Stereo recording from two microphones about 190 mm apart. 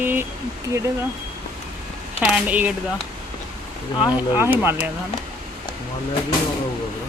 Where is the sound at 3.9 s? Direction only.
25° left (ahead or behind).